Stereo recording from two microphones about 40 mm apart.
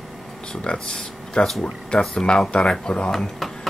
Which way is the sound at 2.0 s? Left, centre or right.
Centre.